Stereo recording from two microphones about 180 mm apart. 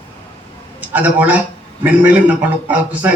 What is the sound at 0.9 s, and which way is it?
A man's voice, 10° right (ahead or behind).